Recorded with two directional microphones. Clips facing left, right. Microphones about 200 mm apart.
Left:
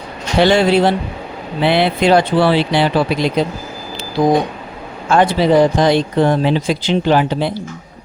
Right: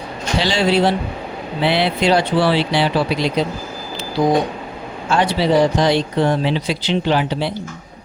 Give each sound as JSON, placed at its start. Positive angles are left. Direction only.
{"t": 0.3, "sound": "speech", "side_deg": 55}
{"t": 5.0, "sound": "speech", "side_deg": 50}